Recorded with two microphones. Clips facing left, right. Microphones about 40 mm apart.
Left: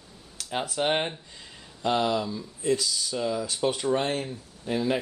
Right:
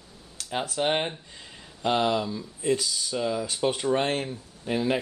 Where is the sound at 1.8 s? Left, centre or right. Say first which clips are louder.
Right 1 dB; centre.